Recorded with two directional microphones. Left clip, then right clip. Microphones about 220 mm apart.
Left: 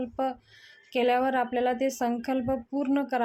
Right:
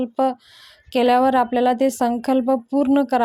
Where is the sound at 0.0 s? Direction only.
35° right (ahead or behind).